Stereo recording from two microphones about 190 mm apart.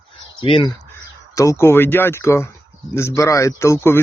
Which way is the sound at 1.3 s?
15° left (ahead or behind).